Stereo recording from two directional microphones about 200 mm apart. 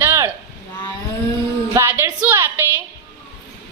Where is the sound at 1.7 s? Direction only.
10° right (ahead or behind).